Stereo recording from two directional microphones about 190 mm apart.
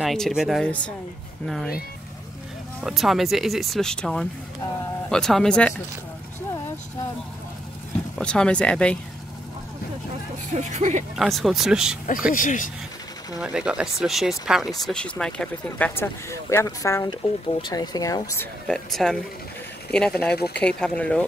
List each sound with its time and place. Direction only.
0.0 s speech: centre (ahead or behind)
2.8 s speech: centre (ahead or behind)
8.2 s speech: 5° left (ahead or behind)
10.5 s speech: 40° right (ahead or behind)
11.1 s speech: centre (ahead or behind)
12.3 s speech: 45° left (ahead or behind)
13.4 s speech: 5° right (ahead or behind); by 18.5 s 15° left (ahead or behind)
18.7 s speech: centre (ahead or behind)